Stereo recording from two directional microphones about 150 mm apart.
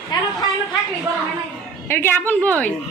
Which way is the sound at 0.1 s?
30° left (ahead or behind).